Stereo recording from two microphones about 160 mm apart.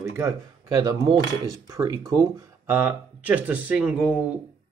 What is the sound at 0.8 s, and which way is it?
Speech, 25° right (ahead or behind).